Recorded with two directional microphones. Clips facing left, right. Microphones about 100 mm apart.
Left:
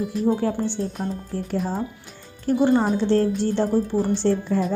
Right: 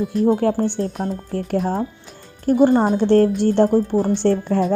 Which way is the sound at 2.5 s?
45° right (ahead or behind).